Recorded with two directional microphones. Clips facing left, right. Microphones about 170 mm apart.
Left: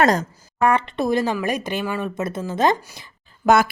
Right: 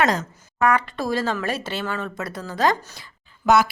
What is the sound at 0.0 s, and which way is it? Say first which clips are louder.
Speech: left 4 dB; 45° left (ahead or behind).